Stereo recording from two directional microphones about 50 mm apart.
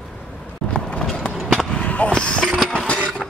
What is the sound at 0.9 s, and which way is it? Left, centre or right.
Run, centre.